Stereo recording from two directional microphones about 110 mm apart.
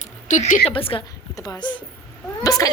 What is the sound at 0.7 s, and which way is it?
Speech, 55° left (ahead or behind).